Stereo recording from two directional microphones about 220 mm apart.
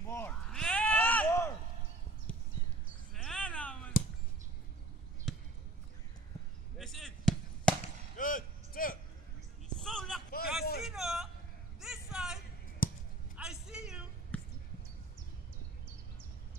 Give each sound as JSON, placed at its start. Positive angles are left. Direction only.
{"t": 0.1, "sound": "a sound", "side_deg": 5}
{"t": 3.2, "sound": "a sound", "side_deg": 5}
{"t": 5.3, "sound": "basketball bounce", "side_deg": 0}
{"t": 6.8, "sound": "basketball bounce", "side_deg": 0}
{"t": 8.2, "sound": "vehicle", "side_deg": 40}
{"t": 9.8, "sound": "a sound", "side_deg": 0}
{"t": 12.8, "sound": "basketball bounce", "side_deg": 40}
{"t": 13.4, "sound": "vehicle", "side_deg": -5}
{"t": 14.3, "sound": "basketball bounce", "side_deg": 5}